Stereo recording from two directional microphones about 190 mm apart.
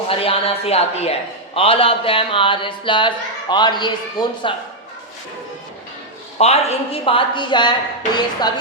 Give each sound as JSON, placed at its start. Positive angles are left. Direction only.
{"t": 0.1, "sound": "a woman's voice", "side_deg": 30}
{"t": 6.4, "sound": "a woman's voice", "side_deg": 35}